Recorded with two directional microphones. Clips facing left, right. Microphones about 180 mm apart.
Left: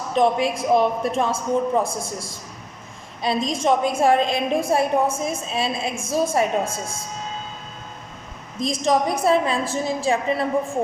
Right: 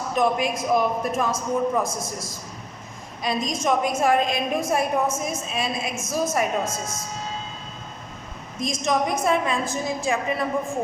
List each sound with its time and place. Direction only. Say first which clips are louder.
0.1 s a woman's voice: left 3 dB; 30° left (ahead or behind)
8.6 s a woman's voice: left 3 dB; 30° left (ahead or behind)